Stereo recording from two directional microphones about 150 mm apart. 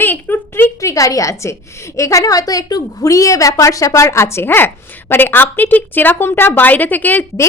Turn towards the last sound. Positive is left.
turn(degrees=10)  # may be behind; listen again after turning